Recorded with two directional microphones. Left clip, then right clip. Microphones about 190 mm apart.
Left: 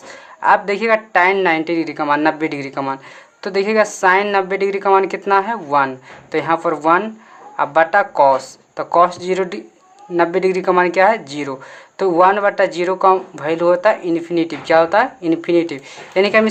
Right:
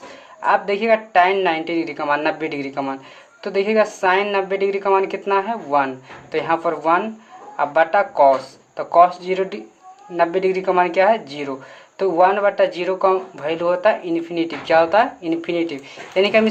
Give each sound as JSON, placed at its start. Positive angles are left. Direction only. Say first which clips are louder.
{"t": 0.3, "sound": "speech", "louder": "left 4 dB", "side_deg": 30}